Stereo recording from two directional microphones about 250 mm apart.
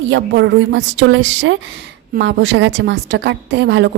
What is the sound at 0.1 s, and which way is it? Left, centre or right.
A woman's voice, right.